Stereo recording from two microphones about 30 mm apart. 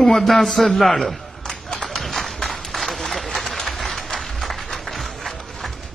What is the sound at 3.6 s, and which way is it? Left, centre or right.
Applause, centre.